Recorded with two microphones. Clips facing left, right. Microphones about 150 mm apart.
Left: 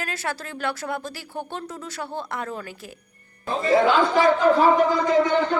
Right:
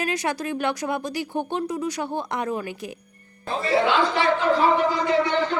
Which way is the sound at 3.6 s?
45° left (ahead or behind).